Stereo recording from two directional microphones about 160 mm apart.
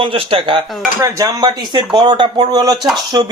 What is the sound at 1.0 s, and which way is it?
Speech, 20° right (ahead or behind).